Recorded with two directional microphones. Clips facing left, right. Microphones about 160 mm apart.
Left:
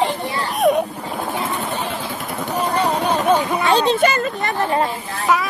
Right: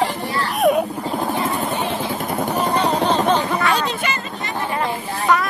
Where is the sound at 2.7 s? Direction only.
10° left (ahead or behind).